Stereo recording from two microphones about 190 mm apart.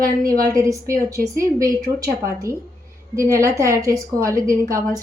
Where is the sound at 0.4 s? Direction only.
15° right (ahead or behind).